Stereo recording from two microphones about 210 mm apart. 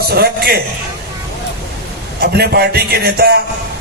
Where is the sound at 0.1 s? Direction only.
50° right (ahead or behind).